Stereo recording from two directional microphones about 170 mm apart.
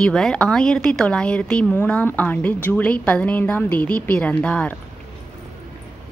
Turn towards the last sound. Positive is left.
turn(degrees=10)  # may be behind; listen again after turning